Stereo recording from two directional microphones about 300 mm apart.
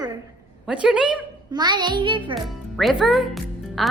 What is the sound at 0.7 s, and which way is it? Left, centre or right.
Speech, centre.